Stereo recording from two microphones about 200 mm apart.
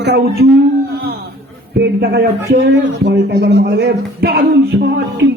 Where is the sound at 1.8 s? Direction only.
55° right (ahead or behind).